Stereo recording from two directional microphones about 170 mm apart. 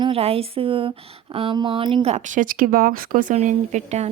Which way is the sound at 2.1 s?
50° right (ahead or behind).